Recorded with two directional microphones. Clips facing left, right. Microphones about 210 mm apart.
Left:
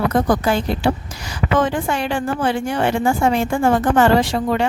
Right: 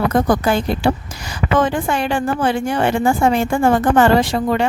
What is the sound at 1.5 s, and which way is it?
A woman's voice, 50° right (ahead or behind).